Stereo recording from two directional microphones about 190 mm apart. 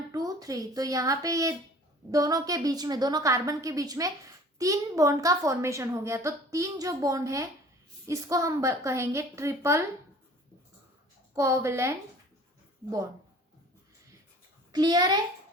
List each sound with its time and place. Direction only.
0.1 s a woman's voice: 20° right (ahead or behind)
11.3 s a woman's voice: 15° right (ahead or behind)
14.7 s a woman's voice: 20° right (ahead or behind)